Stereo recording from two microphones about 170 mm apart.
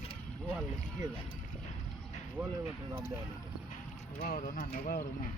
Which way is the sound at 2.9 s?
15° right (ahead or behind).